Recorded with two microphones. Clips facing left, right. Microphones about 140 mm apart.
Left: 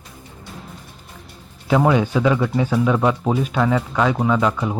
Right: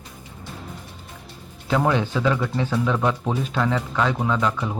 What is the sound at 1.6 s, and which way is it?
Speech, 10° left (ahead or behind).